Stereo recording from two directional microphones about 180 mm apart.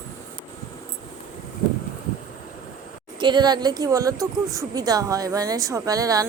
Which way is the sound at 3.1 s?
25° right (ahead or behind).